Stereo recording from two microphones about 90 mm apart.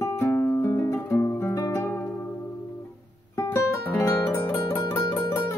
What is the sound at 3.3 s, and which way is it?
Guitar, 35° left (ahead or behind).